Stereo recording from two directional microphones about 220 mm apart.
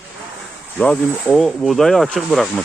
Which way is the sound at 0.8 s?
5° left (ahead or behind).